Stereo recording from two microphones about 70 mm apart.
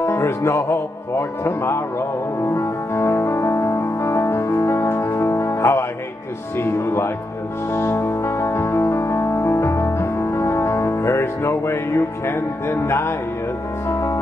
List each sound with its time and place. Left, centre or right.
0.0 s music: left
6.5 s speech: left
7.7 s music: left
12.3 s speech: left
13.8 s music: left